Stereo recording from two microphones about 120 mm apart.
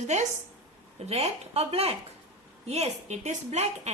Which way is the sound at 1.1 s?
60° right (ahead or behind).